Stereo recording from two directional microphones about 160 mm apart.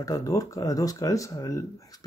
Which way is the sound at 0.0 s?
20° left (ahead or behind).